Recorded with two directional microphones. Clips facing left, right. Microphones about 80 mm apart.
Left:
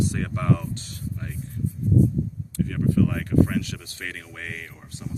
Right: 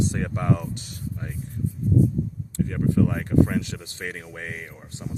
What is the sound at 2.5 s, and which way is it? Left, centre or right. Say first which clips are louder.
Speech: even; right.